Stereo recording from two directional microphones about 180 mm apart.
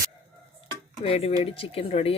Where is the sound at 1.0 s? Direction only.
35° left (ahead or behind).